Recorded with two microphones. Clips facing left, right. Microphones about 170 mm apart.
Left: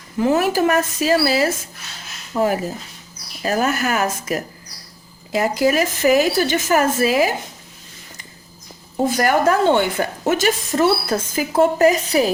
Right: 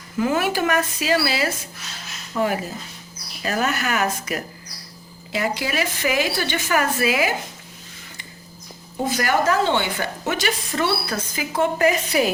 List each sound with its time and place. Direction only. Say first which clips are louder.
0.2 s a woman's voice: left 4 dB; 35° left (ahead or behind)
9.0 s a woman's voice: left 4 dB; 50° left (ahead or behind)